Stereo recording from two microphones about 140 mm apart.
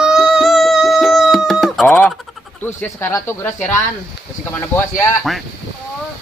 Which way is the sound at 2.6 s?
10° left (ahead or behind).